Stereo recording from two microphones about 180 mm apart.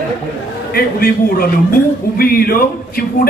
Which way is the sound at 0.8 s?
55° left (ahead or behind).